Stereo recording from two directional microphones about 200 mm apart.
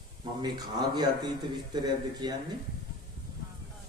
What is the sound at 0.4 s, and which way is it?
A man's voice, 20° right (ahead or behind).